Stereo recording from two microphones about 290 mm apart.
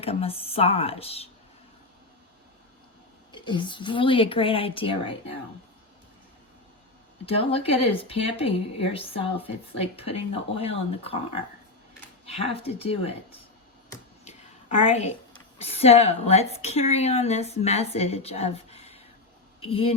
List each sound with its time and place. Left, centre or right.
0.0 s speech: centre
3.3 s a woman's voice: centre
7.3 s speech: centre
14.3 s a sound: left
15.5 s speech: left